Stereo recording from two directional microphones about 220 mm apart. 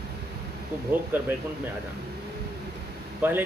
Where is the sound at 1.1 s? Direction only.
10° right (ahead or behind).